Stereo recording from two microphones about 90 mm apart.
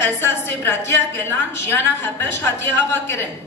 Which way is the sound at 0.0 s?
25° left (ahead or behind).